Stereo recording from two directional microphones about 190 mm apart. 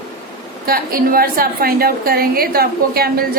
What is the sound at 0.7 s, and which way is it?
A woman's voice, 50° right (ahead or behind).